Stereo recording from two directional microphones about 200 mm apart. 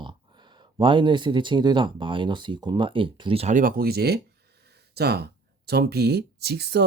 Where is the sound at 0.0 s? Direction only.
20° right (ahead or behind).